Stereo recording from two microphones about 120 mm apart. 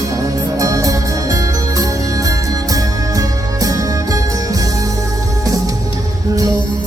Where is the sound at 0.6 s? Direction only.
30° right (ahead or behind).